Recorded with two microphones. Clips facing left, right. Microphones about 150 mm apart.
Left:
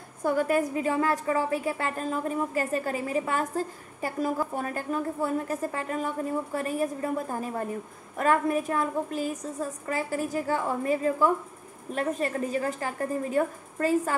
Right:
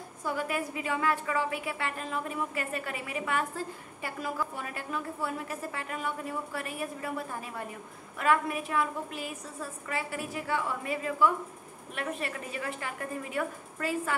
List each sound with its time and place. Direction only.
0.2 s a woman's voice: 45° left (ahead or behind)